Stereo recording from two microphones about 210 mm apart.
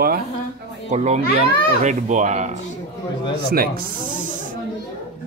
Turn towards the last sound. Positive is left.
turn(degrees=-45)  # may be behind; listen again after turning